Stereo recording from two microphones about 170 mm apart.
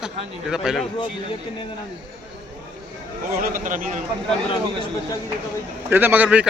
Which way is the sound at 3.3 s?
55° right (ahead or behind).